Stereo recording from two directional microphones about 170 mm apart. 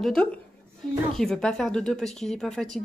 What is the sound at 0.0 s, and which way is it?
Speech, 5° left (ahead or behind).